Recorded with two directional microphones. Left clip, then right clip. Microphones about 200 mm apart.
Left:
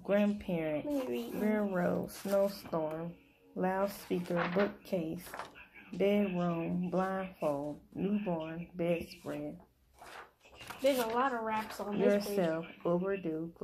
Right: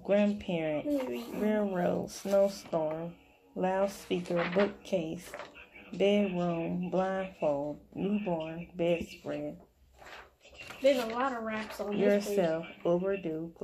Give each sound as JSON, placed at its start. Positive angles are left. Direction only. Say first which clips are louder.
{"t": 0.0, "sound": "speech", "louder": "right 3 dB", "side_deg": 5}
{"t": 0.9, "sound": "speech", "louder": "right 2 dB", "side_deg": 50}
{"t": 1.4, "sound": "speech", "louder": "right 3 dB", "side_deg": 5}
{"t": 10.6, "sound": "speech", "louder": "right 4 dB", "side_deg": 50}
{"t": 12.0, "sound": "speech", "louder": "right 3 dB", "side_deg": 5}